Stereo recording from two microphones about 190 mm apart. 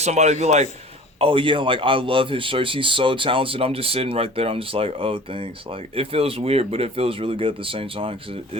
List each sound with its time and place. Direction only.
0.0 s a man's voice: 35° right (ahead or behind)